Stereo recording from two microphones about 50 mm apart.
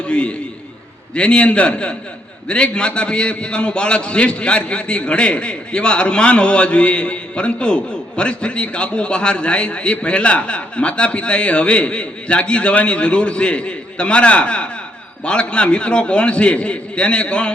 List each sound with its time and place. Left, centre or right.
0.0 s a man's voice: centre